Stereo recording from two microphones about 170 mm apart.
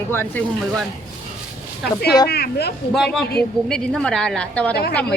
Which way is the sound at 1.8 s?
70° left (ahead or behind).